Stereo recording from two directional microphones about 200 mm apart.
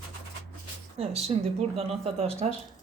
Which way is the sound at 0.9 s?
30° right (ahead or behind).